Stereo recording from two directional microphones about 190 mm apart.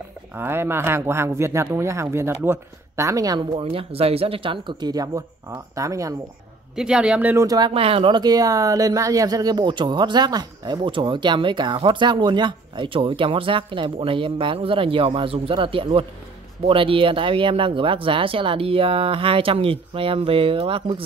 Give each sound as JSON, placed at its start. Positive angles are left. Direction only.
{"t": 0.4, "sound": "speech", "side_deg": -10}
{"t": 6.7, "sound": "speech", "side_deg": -5}